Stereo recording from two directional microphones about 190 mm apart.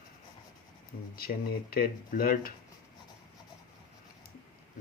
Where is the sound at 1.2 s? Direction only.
50° left (ahead or behind).